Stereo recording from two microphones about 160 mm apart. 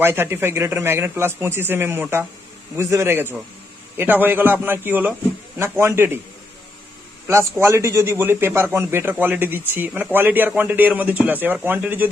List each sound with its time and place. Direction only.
0.0 s a man's voice: 15° right (ahead or behind)
7.6 s a man's voice: 15° right (ahead or behind)